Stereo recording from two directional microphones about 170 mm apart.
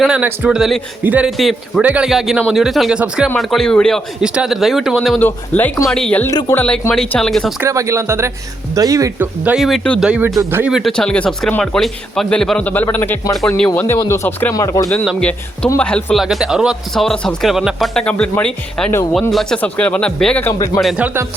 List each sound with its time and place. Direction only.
0.0 s speech: 5° right (ahead or behind)
5.2 s speech: 10° left (ahead or behind)
7.6 s speech: 15° right (ahead or behind); by 10.1 s 5° left (ahead or behind)
10.1 s speech: 10° right (ahead or behind); by 14.8 s 20° left (ahead or behind)
14.8 s speech: 5° left (ahead or behind)
20.8 s speech: 5° right (ahead or behind)